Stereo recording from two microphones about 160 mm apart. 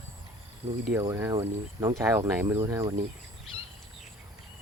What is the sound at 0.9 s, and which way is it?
Speech, 20° right (ahead or behind).